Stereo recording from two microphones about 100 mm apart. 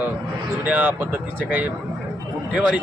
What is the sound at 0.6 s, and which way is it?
Speech, 15° right (ahead or behind).